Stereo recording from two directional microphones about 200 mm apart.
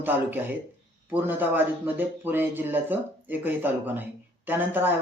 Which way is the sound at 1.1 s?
10° right (ahead or behind).